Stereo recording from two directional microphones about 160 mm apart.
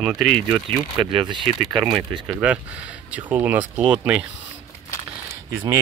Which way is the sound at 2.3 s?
10° right (ahead or behind).